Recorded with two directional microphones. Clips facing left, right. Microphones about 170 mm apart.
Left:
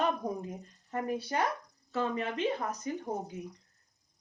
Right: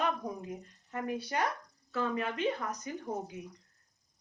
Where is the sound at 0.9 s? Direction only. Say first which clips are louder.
Left 2 dB; 30° left (ahead or behind).